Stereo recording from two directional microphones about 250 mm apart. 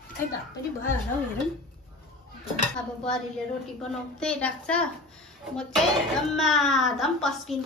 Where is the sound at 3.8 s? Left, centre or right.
Centre.